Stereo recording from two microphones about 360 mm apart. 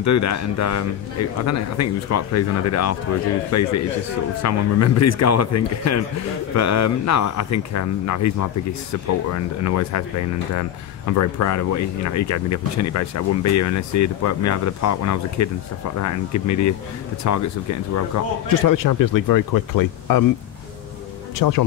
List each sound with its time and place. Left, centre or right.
0.0 s speech: left
21.4 s speech: left